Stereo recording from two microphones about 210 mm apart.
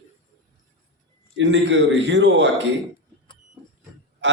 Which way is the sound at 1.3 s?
60° right (ahead or behind).